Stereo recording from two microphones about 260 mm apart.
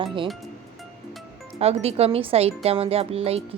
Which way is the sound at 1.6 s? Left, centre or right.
Right.